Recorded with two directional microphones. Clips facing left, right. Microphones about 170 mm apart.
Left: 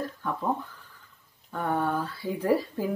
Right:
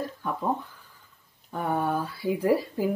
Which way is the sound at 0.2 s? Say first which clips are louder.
Right 1 dB; 10° right (ahead or behind).